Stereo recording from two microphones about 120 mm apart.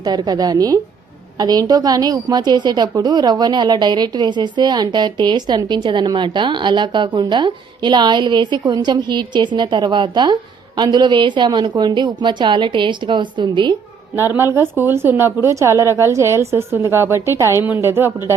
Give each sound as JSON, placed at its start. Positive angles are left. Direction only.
{"t": 0.0, "sound": "a woman's voice", "side_deg": -35}
{"t": 14.2, "sound": "a woman's voice", "side_deg": -20}